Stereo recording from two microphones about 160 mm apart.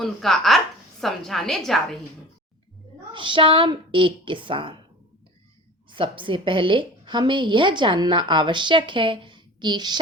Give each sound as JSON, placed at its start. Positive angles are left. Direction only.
{"t": 0.0, "sound": "a woman's voice", "side_deg": 0}
{"t": 3.1, "sound": "a woman's voice", "side_deg": -30}
{"t": 5.9, "sound": "a woman's voice", "side_deg": -30}